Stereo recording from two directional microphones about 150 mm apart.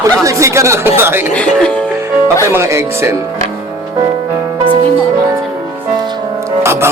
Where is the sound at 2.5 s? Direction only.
20° right (ahead or behind).